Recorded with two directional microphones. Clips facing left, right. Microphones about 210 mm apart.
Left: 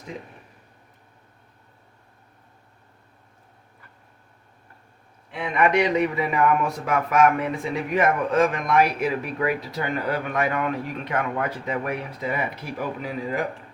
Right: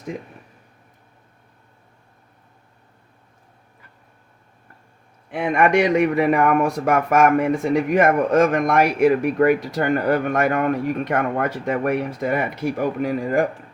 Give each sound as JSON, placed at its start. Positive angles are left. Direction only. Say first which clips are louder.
{"t": 5.3, "sound": "speech", "louder": "right 4 dB", "side_deg": -50}